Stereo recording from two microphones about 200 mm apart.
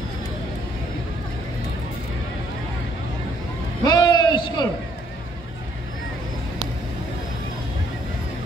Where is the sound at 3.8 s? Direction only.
20° left (ahead or behind).